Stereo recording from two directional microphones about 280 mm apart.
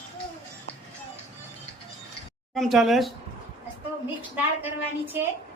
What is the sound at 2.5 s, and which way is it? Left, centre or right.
Speech, centre.